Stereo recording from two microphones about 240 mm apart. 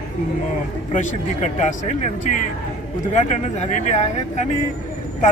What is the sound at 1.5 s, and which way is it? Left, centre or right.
Speech, left.